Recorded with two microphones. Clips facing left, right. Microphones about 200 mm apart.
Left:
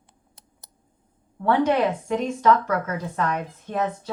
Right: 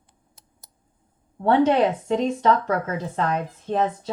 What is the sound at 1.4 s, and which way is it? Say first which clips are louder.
Speech: right 2 dB; 25° right (ahead or behind).